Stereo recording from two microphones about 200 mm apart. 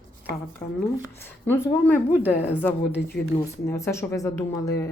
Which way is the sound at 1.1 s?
10° left (ahead or behind).